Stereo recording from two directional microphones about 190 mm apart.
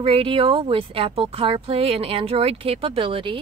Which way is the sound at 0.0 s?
30° right (ahead or behind).